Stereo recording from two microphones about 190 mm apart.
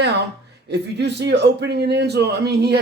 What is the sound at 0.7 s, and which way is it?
A man's voice, 60° right (ahead or behind).